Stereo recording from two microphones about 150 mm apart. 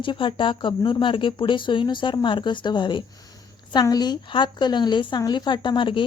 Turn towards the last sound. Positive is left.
turn(degrees=35)  # may be behind; listen again after turning